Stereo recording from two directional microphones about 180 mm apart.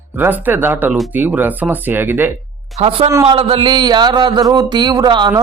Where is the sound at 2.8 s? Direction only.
30° right (ahead or behind).